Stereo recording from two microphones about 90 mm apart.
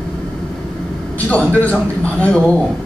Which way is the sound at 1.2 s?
15° left (ahead or behind).